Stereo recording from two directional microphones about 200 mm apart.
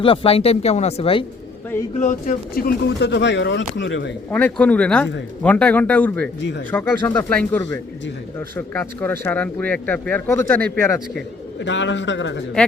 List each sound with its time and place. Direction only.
0.0 s speech: 25° left (ahead or behind)
2.0 s speech: 40° left (ahead or behind); by 4.1 s 65° left (ahead or behind)
4.3 s speech: 10° left (ahead or behind)
11.6 s speech: 65° left (ahead or behind)